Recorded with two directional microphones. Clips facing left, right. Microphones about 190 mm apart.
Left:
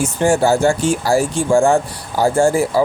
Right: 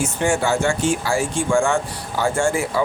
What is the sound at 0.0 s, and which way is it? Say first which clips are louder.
Speech: left 5 dB; 35° left (ahead or behind).